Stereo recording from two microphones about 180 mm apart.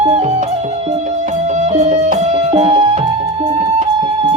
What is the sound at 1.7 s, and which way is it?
Music, 35° right (ahead or behind).